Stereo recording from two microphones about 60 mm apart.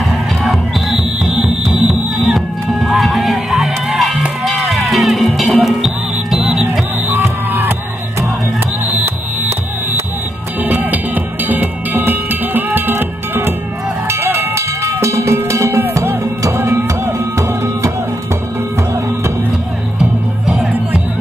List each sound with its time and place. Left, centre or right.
0.4 s music: centre
7.1 s music: right
9.0 s music: right
10.6 s music: right
14.0 s cowbell: right
16.5 s music: right
20.0 s music: centre